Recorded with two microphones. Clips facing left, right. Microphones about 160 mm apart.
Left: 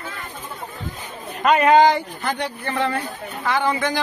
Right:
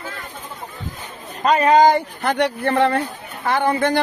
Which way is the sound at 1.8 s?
60° right (ahead or behind).